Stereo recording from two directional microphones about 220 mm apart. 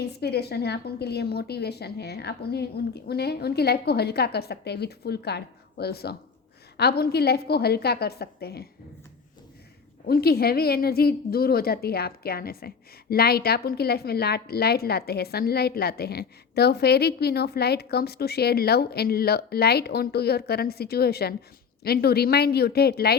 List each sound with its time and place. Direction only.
0.0 s a woman's voice: 45° left (ahead or behind)
10.1 s a woman's voice: 45° left (ahead or behind)